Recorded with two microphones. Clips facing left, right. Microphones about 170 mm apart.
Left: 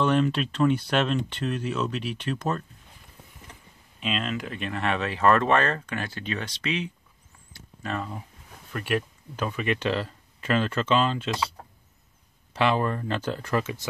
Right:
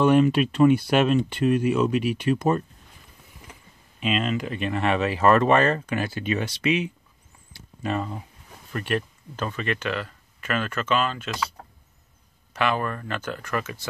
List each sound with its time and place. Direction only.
0.0 s speech: 10° right (ahead or behind)
4.0 s speech: 5° right (ahead or behind)
8.7 s speech: 5° left (ahead or behind)
9.8 s speech: 30° left (ahead or behind)
12.5 s speech: 25° left (ahead or behind)